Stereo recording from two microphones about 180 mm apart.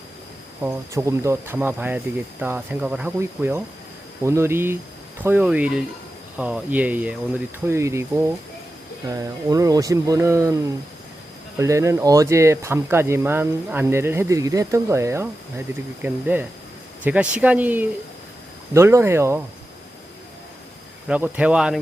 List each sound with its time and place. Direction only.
0.6 s speech: 15° right (ahead or behind)
21.1 s speech: 5° right (ahead or behind)